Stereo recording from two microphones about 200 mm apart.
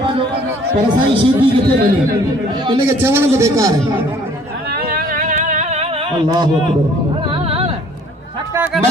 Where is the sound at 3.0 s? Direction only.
10° right (ahead or behind).